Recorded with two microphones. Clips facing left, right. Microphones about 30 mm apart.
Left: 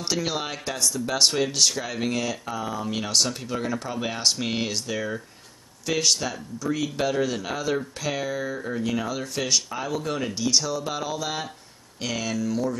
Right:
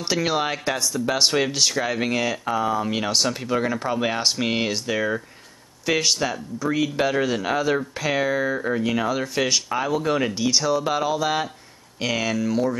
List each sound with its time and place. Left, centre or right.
0.0 s speech: centre